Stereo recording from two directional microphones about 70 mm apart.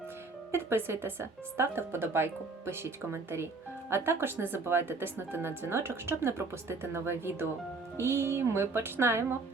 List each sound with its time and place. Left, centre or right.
0.5 s speech: right